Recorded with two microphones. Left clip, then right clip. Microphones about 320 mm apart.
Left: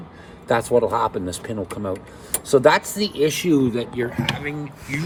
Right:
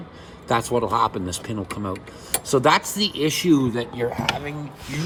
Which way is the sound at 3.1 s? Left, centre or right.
Centre.